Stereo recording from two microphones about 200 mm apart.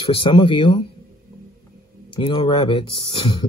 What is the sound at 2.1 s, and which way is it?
Speech, 25° left (ahead or behind).